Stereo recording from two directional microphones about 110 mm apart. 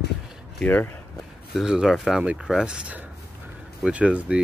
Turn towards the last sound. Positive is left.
turn(degrees=-10)  # may be behind; listen again after turning